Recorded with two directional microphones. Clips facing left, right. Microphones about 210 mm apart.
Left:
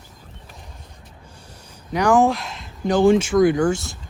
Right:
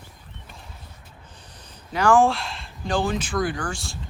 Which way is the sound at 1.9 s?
15° left (ahead or behind).